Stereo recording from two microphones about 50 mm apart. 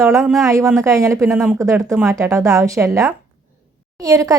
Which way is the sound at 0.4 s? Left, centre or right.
Right.